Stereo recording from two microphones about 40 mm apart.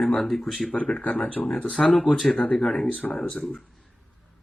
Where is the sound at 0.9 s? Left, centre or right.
Left.